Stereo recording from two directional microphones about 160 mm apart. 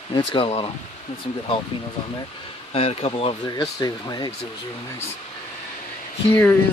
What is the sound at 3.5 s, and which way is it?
Speech, 25° left (ahead or behind).